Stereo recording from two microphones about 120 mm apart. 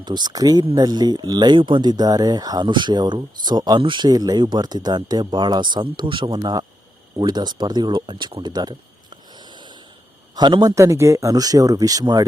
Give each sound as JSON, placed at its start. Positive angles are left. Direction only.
{"t": 0.0, "sound": "speech", "side_deg": -35}
{"t": 10.3, "sound": "speech", "side_deg": -35}